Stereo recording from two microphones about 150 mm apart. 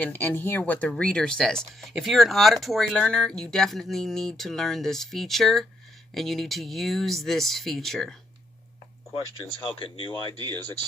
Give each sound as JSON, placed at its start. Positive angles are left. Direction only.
{"t": 0.0, "sound": "speech", "side_deg": 15}
{"t": 9.6, "sound": "speech", "side_deg": 35}